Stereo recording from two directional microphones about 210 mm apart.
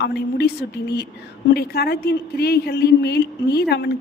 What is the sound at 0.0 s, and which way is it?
A woman's voice, 50° left (ahead or behind).